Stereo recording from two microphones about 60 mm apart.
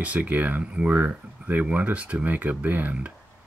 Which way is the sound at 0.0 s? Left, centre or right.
Right.